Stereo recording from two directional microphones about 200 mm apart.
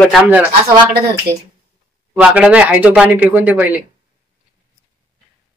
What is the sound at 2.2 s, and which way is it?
Speech, 5° right (ahead or behind).